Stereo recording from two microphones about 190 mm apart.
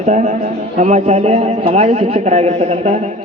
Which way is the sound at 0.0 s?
40° right (ahead or behind).